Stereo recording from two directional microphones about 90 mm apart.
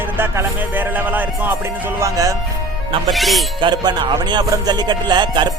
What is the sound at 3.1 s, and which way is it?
Speech, centre (ahead or behind).